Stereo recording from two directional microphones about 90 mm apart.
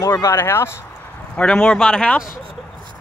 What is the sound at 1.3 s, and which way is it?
Speech, 5° left (ahead or behind).